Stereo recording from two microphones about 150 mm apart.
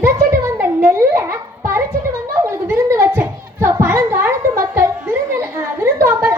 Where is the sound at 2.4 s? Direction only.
15° right (ahead or behind).